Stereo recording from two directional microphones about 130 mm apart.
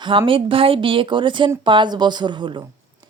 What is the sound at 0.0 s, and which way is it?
A woman's voice, 40° right (ahead or behind).